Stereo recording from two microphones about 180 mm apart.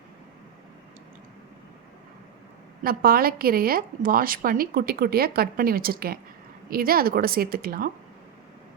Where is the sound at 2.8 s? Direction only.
55° right (ahead or behind).